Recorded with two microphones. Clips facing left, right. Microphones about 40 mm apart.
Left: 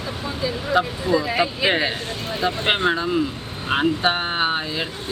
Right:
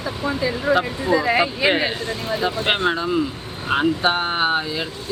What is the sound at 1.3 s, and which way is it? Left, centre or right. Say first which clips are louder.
Speech: right 2 dB; right.